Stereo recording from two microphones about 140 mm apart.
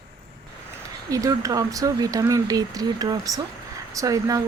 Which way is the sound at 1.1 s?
25° right (ahead or behind).